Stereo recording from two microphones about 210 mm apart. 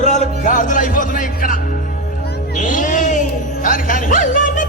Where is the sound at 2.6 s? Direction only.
40° left (ahead or behind).